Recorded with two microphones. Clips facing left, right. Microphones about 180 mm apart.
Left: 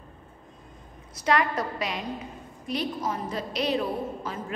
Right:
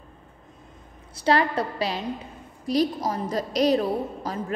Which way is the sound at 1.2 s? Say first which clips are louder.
Right 3 dB; 30° right (ahead or behind).